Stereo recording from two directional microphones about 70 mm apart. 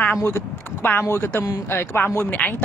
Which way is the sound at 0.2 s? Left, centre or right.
Left.